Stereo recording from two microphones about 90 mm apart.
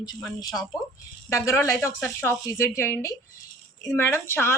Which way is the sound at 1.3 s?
35° left (ahead or behind).